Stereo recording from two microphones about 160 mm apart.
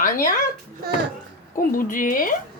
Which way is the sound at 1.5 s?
60° left (ahead or behind).